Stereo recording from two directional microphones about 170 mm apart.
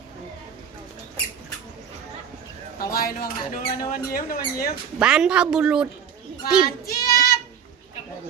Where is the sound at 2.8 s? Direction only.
60° left (ahead or behind).